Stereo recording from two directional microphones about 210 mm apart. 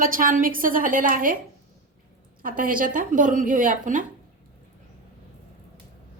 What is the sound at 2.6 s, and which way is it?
A woman's voice, 40° right (ahead or behind).